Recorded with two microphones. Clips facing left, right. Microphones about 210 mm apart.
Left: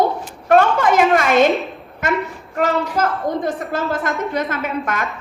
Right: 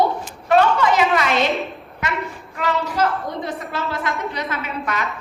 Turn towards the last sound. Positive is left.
turn(degrees=50)  # may be behind; listen again after turning